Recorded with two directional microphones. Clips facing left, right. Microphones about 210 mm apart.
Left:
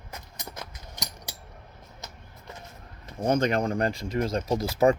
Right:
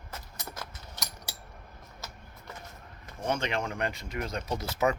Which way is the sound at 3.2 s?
40° left (ahead or behind).